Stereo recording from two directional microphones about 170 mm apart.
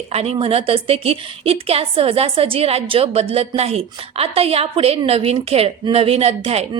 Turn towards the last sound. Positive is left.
turn(degrees=-35)  # may be behind; listen again after turning